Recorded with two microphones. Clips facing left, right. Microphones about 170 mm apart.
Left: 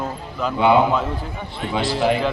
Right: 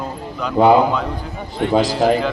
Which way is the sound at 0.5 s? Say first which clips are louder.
Right 4 dB; 40° right (ahead or behind).